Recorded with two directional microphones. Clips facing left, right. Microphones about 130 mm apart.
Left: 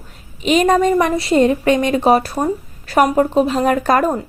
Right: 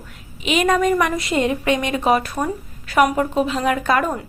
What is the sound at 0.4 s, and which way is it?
A woman's voice, 35° left (ahead or behind).